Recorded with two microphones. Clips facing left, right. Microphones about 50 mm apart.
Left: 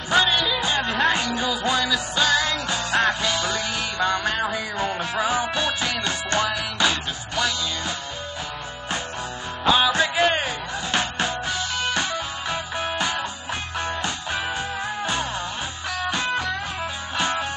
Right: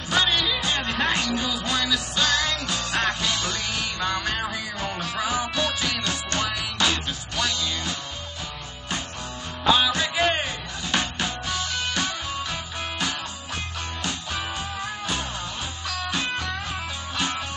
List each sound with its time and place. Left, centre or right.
0.1 s music: centre
4.7 s music: left
6.5 s music: centre
9.8 s music: centre
13.7 s music: left
15.9 s music: left
17.2 s music: left